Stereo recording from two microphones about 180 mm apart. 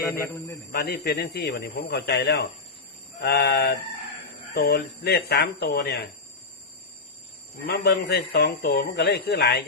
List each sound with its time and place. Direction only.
0.0 s a man's voice: 15° left (ahead or behind)
0.7 s speech: 60° left (ahead or behind)
7.7 s speech: 60° left (ahead or behind)